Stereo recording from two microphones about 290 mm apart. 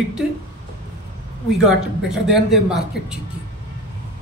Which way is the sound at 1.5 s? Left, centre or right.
Centre.